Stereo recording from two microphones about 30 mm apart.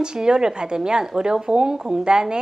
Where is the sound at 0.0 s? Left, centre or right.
Right.